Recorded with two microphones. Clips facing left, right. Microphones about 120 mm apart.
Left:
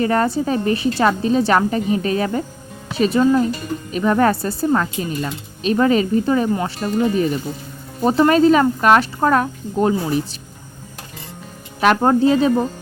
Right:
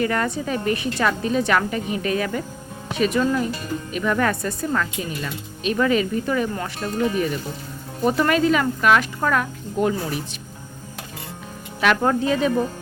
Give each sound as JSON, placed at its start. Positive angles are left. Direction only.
{"t": 0.0, "sound": "speech", "side_deg": 35}
{"t": 11.8, "sound": "speech", "side_deg": 35}